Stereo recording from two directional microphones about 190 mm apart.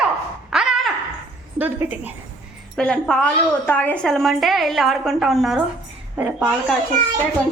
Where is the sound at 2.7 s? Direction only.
5° left (ahead or behind).